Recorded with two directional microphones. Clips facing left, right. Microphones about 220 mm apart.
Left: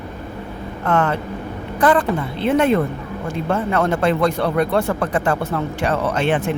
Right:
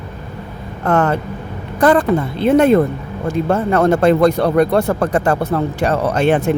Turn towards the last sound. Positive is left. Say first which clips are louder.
# right 5 dB
turn(degrees=-40)  # may be behind; listen again after turning